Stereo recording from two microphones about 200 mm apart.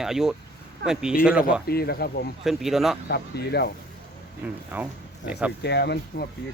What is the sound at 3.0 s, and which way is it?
Speech, 55° left (ahead or behind).